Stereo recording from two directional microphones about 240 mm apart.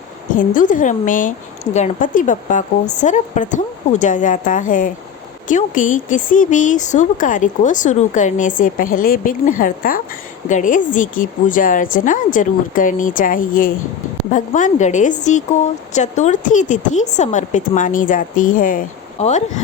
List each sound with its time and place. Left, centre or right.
0.3 s speech: left